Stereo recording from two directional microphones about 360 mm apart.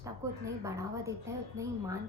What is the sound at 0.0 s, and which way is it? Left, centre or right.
A woman's voice, centre.